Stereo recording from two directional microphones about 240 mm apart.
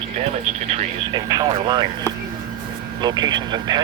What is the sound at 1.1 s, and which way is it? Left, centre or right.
Speech, centre.